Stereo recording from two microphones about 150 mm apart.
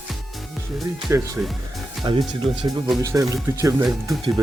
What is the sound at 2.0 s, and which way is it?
Speech, 30° right (ahead or behind).